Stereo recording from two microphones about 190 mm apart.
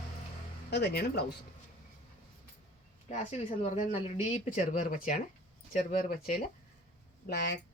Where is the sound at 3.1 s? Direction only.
35° left (ahead or behind).